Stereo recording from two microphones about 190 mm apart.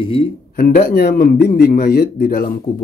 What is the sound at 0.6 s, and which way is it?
Speech, 50° left (ahead or behind).